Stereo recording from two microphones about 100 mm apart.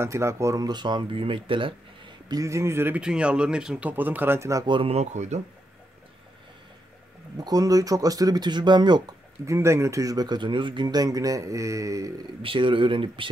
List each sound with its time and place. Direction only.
0.0 s a man's voice: 30° right (ahead or behind)
0.7 s speech: 50° right (ahead or behind)
2.2 s a man's voice: 35° right (ahead or behind)
3.0 s speech: 10° right (ahead or behind); by 4.6 s 30° right (ahead or behind)
4.6 s speech: 55° right (ahead or behind)
7.3 s speech: 40° right (ahead or behind)
9.5 s speech: 30° right (ahead or behind)
12.4 s speech: 60° right (ahead or behind)